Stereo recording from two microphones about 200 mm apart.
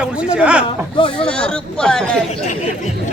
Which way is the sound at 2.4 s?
40° left (ahead or behind).